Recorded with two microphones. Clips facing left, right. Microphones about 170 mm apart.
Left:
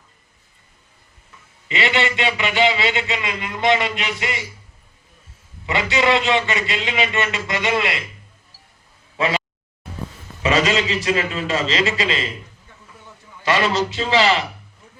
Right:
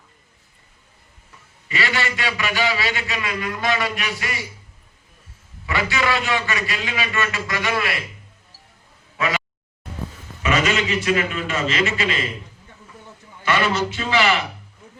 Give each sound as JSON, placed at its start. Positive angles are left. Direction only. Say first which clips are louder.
{"t": 1.6, "sound": "a man's voice", "louder": "left 4 dB", "side_deg": 20}
{"t": 5.6, "sound": "a man's voice", "louder": "left 3 dB", "side_deg": 25}
{"t": 9.1, "sound": "speech", "louder": "left 3 dB", "side_deg": 30}
{"t": 10.4, "sound": "a man's voice", "louder": "left 2 dB", "side_deg": 30}
{"t": 13.4, "sound": "a man's voice", "louder": "left 2 dB", "side_deg": 30}